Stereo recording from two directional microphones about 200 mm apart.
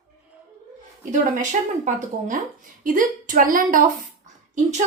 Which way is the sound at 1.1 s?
35° right (ahead or behind).